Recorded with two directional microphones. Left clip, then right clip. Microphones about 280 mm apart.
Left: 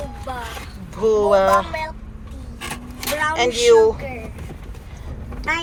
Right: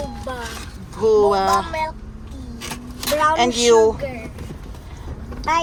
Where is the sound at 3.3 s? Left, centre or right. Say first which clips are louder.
Left 3 dB; centre.